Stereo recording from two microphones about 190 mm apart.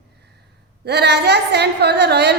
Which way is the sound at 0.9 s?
60° right (ahead or behind).